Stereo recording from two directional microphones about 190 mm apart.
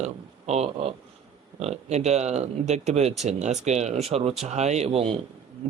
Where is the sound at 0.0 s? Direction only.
35° right (ahead or behind).